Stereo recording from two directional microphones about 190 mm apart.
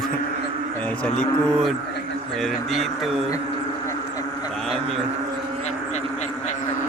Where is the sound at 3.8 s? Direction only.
20° left (ahead or behind).